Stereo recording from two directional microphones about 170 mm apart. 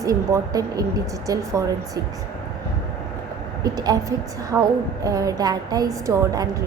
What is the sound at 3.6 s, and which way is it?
A woman's voice, 20° right (ahead or behind).